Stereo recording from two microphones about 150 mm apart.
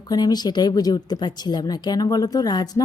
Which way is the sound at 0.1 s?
25° left (ahead or behind).